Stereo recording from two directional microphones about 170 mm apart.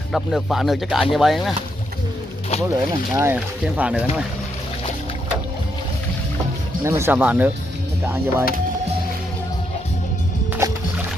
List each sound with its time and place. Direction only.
0.1 s speech: centre (ahead or behind)
3.2 s speech: 15° right (ahead or behind)
6.8 s speech: 15° right (ahead or behind)
10.6 s music: 20° right (ahead or behind)